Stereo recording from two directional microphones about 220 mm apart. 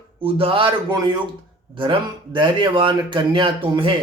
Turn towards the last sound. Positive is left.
turn(degrees=-25)  # may be behind; listen again after turning